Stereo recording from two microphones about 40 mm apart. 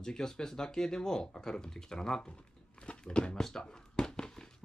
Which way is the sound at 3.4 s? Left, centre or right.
Centre.